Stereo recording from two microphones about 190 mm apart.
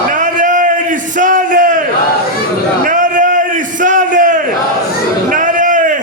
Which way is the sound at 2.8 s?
45° right (ahead or behind).